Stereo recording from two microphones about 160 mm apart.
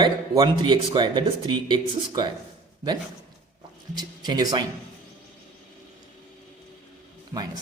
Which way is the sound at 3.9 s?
25° right (ahead or behind).